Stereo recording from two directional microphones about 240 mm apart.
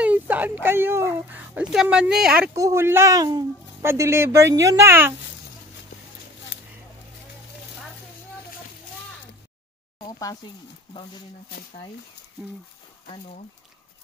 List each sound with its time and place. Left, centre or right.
0.0 s speech: centre
10.0 s speech: centre